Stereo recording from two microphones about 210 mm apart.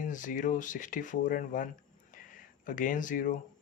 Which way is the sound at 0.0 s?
40° left (ahead or behind).